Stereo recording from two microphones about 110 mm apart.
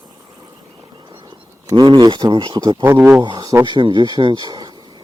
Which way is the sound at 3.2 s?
40° right (ahead or behind).